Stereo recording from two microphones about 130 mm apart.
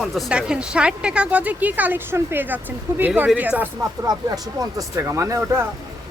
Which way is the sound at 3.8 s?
25° right (ahead or behind).